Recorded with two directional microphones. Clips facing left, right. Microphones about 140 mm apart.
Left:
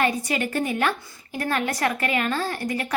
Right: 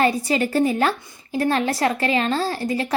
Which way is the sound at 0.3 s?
30° right (ahead or behind).